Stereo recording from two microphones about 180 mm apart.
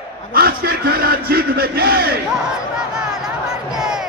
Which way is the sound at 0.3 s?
60° right (ahead or behind).